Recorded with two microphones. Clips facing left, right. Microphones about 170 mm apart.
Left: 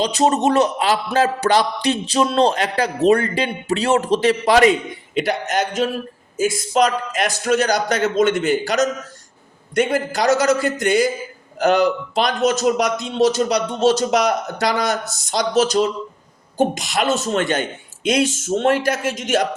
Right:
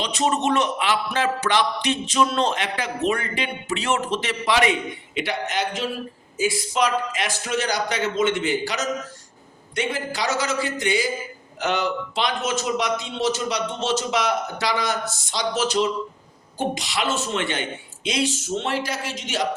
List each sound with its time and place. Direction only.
0.0 s a man's voice: 35° left (ahead or behind)